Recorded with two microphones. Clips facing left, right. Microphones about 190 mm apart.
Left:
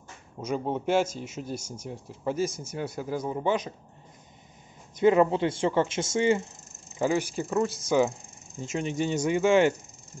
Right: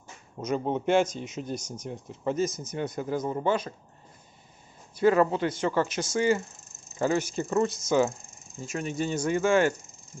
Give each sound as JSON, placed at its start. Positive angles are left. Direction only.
{"t": 0.4, "sound": "speech", "side_deg": 10}
{"t": 4.9, "sound": "speech", "side_deg": 20}
{"t": 7.0, "sound": "speech", "side_deg": 10}